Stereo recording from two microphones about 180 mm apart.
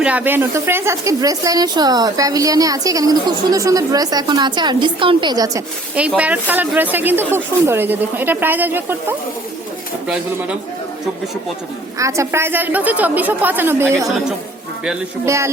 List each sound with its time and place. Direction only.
0.0 s speech: 10° right (ahead or behind)
6.0 s a woman's voice: 5° right (ahead or behind)
11.9 s a woman's voice: 15° right (ahead or behind)